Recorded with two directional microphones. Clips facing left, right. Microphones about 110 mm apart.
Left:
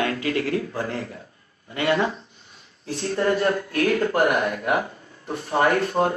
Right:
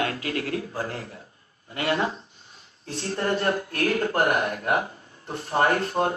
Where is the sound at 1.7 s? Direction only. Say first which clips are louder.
Left 3 dB; 30° right (ahead or behind).